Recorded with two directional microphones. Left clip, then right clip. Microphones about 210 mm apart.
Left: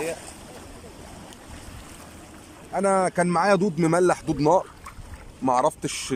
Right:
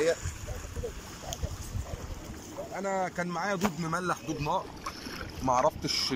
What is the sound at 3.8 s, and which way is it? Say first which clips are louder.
Speech: left 11 dB; 35° left (ahead or behind).